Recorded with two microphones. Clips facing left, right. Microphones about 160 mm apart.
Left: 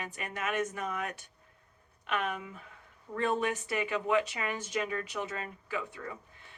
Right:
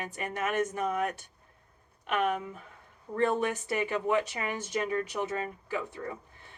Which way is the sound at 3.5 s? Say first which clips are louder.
Right 2 dB; 40° right (ahead or behind).